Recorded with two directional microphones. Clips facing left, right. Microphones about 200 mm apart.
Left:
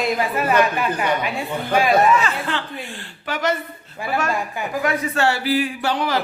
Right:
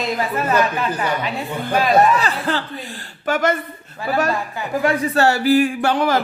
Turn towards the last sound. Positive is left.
turn(degrees=-50)  # may be behind; listen again after turning